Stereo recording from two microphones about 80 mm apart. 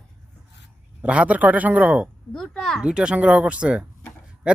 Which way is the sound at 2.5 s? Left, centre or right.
Centre.